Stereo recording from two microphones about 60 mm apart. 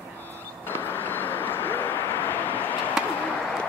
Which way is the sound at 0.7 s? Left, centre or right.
Left.